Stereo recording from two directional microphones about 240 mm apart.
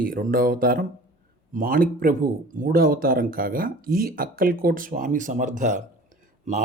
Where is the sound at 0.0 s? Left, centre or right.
Right.